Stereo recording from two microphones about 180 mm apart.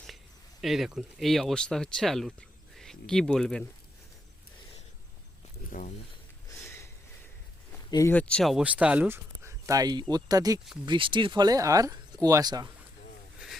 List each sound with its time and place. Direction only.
0.6 s speech: centre (ahead or behind)
5.7 s speech: 50° left (ahead or behind)
6.5 s a sound: 15° left (ahead or behind)
7.9 s speech: 20° left (ahead or behind)
8.1 s speech: 5° left (ahead or behind); by 12.6 s 20° right (ahead or behind)